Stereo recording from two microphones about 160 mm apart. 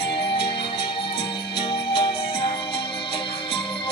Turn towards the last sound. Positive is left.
turn(degrees=35)  # may be behind; listen again after turning